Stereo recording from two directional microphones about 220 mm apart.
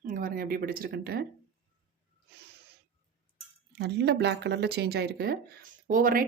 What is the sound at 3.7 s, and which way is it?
Speech, 50° right (ahead or behind).